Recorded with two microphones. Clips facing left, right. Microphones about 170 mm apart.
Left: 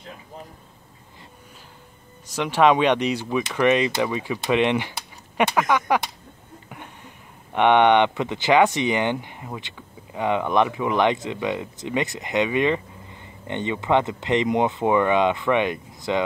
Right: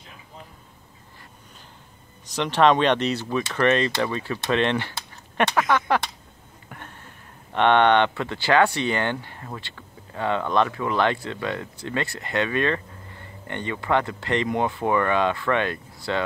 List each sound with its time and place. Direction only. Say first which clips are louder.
2.2 s speech: left 1 dB; 10° left (ahead or behind)
6.7 s a sound: even; 15° left (ahead or behind)
7.5 s speech: left 2 dB; 15° left (ahead or behind)